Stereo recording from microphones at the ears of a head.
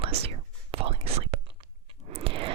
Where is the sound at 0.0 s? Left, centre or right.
Right.